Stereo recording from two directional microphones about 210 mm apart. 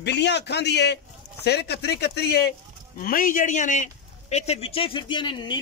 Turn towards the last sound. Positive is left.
turn(degrees=20)  # may be behind; listen again after turning